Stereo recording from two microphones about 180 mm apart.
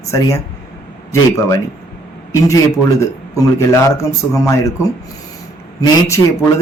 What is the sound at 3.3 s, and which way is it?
A woman's voice, 15° left (ahead or behind).